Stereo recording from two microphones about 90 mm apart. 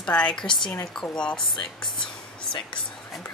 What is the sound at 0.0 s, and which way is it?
A woman's voice, 10° left (ahead or behind).